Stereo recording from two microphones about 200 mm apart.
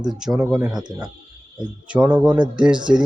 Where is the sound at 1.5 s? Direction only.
5° right (ahead or behind).